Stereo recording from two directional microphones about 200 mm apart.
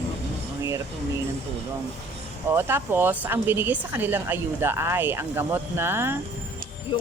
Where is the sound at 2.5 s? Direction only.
10° right (ahead or behind).